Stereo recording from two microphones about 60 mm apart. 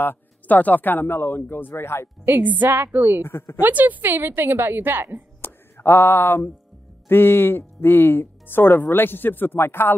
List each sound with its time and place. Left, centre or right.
0.0 s speech: left
2.2 s a woman's voice: right
3.2 s a woman's voice: left
3.5 s a woman's voice: right
5.4 s music: left
7.1 s speech: left